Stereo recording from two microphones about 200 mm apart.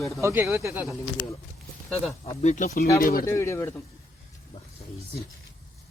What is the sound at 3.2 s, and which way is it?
Speech, 15° left (ahead or behind).